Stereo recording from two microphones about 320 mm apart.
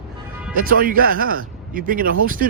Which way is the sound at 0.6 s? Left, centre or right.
Right.